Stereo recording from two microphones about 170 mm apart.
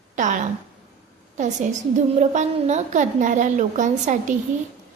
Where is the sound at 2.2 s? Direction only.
45° right (ahead or behind).